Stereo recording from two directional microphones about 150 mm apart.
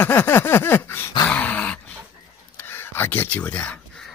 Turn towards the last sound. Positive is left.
turn(degrees=10)  # may be behind; listen again after turning